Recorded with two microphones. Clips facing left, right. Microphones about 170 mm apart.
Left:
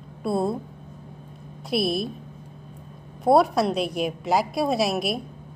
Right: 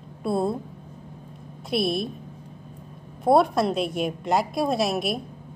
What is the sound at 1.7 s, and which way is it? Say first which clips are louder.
Speech: even; centre (ahead or behind).